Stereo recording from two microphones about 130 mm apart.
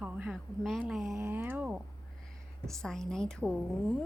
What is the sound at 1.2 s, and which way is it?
Cattle, 15° right (ahead or behind).